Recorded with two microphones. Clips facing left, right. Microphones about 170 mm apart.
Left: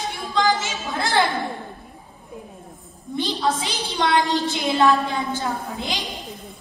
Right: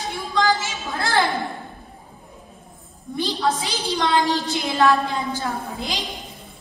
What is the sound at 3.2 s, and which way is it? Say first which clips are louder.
A woman's voice: even; 20° left (ahead or behind).